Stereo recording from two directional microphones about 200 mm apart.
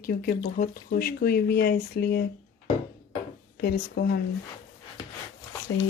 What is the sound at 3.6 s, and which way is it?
Speech, 50° left (ahead or behind).